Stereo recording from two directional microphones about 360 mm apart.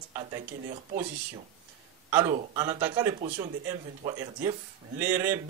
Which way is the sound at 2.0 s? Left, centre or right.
Centre.